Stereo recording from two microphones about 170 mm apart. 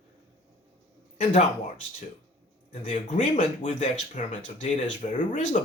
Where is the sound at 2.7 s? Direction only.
45° left (ahead or behind).